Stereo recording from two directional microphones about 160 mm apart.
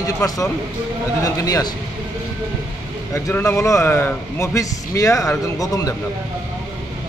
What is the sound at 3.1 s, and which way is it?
A man's voice, 15° left (ahead or behind).